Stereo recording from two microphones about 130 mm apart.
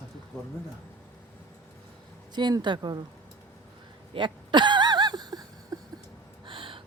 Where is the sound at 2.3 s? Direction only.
35° right (ahead or behind).